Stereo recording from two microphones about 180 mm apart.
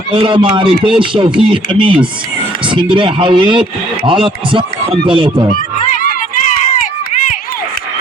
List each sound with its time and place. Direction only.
0.1 s speech: 30° right (ahead or behind)
5.5 s run: 50° left (ahead or behind)